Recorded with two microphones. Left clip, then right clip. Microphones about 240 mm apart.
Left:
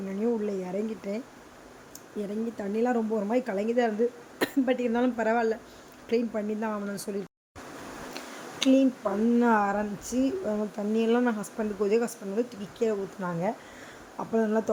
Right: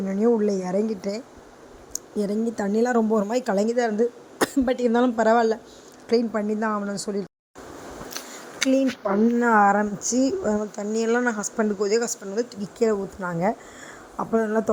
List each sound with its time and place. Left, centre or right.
0.1 s a woman's voice: right
8.1 s a sound: right
8.7 s speech: right